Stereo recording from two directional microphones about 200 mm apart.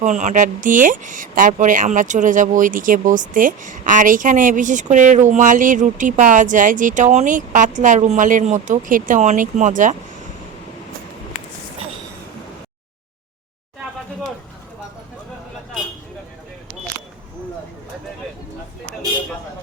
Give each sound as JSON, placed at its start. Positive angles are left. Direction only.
{"t": 0.0, "sound": "speech", "side_deg": -35}